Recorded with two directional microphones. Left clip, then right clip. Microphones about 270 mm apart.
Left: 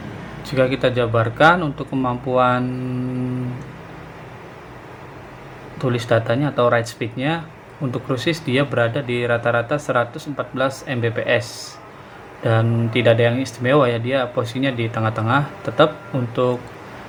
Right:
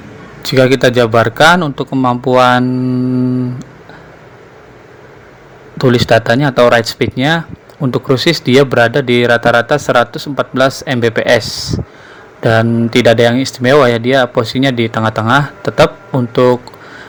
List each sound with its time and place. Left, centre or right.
0.4 s speech: right
5.7 s speech: right